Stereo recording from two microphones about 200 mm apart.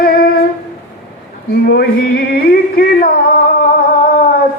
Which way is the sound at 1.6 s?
50° left (ahead or behind).